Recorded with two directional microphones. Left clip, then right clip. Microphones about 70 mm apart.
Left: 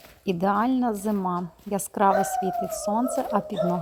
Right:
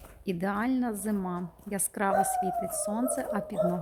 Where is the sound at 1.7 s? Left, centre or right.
Centre.